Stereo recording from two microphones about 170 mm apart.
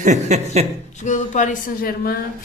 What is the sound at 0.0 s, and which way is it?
Speech, 45° right (ahead or behind).